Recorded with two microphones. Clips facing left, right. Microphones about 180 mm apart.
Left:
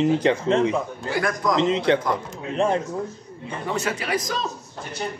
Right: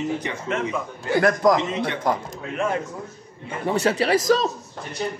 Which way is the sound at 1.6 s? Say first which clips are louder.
Left 7 dB; 90° left.